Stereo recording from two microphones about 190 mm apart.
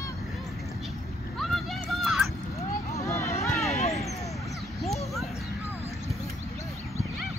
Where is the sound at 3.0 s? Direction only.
15° left (ahead or behind).